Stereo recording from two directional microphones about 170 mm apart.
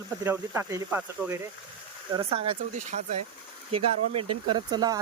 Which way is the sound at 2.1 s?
30° right (ahead or behind).